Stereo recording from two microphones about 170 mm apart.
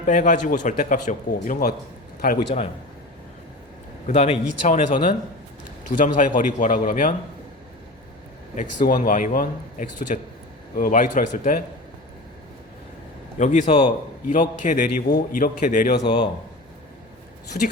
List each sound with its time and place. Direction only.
0.0 s a man's voice: 50° left (ahead or behind)
2.2 s a man's voice: 75° left (ahead or behind)
4.0 s a man's voice: 40° left (ahead or behind)
6.0 s a man's voice: 50° left (ahead or behind)
8.5 s a man's voice: 50° left (ahead or behind)
13.4 s a man's voice: 45° left (ahead or behind)
13.7 s a man's voice: 30° left (ahead or behind)
14.3 s a man's voice: 50° left (ahead or behind)
16.0 s a man's voice: 25° left (ahead or behind)
17.5 s a man's voice: 50° left (ahead or behind)